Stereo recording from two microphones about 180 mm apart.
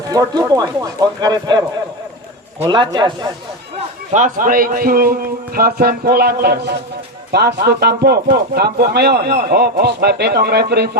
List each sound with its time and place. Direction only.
0.1 s speech: 20° right (ahead or behind)
3.8 s a man's voice: 40° right (ahead or behind); by 10.9 s 65° right (ahead or behind)